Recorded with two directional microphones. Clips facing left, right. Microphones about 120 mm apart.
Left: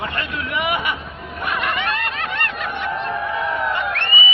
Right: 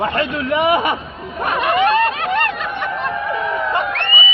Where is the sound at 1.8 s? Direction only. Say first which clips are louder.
Right 9 dB; 30° right (ahead or behind).